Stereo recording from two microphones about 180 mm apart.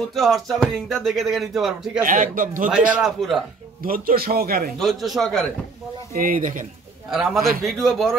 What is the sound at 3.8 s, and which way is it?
Speech, 55° right (ahead or behind).